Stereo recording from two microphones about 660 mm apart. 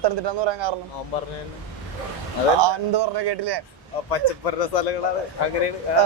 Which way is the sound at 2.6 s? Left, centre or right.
Right.